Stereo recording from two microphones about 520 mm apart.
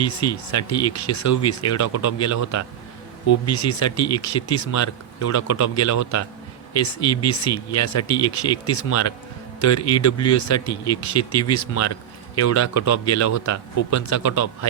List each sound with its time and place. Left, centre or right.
0.0 s a man's voice: left